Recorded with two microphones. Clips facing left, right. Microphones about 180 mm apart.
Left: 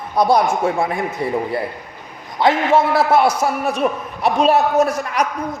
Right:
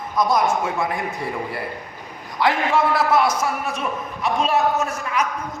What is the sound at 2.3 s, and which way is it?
Speech, 25° left (ahead or behind).